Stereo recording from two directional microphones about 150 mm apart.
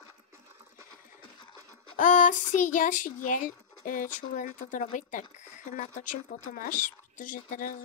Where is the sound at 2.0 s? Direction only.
60° left (ahead or behind).